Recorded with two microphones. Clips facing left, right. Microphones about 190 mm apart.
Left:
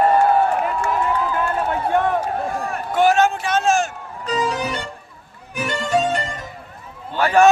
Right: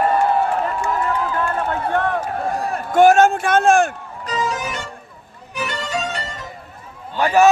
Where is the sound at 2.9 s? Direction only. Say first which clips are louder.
Right 4 dB; 50° right (ahead or behind).